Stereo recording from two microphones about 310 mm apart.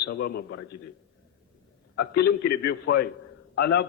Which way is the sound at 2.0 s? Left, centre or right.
Left.